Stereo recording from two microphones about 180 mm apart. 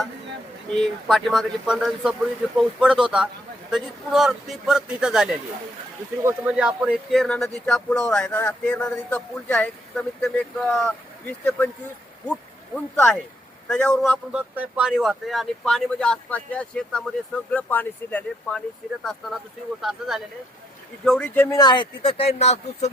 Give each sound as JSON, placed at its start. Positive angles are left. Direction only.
{"t": 0.7, "sound": "speech", "side_deg": 0}
{"t": 12.7, "sound": "speech", "side_deg": 5}
{"t": 19.8, "sound": "speech", "side_deg": 0}
{"t": 21.5, "sound": "speech", "side_deg": 25}